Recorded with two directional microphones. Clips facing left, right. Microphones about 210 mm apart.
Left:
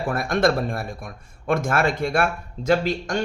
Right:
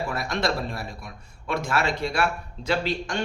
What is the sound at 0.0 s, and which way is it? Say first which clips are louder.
Speech: left 6 dB; 50° left (ahead or behind).